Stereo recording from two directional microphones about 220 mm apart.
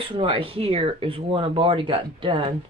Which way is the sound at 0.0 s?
25° right (ahead or behind).